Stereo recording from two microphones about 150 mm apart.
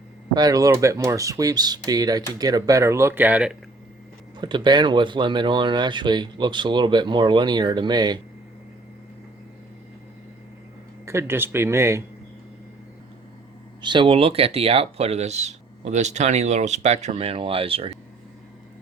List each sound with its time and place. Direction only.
0.3 s speech: 25° right (ahead or behind); by 3.6 s 10° right (ahead or behind)
4.4 s speech: 30° right (ahead or behind)
11.0 s speech: 15° right (ahead or behind)
13.8 s speech: 35° right (ahead or behind)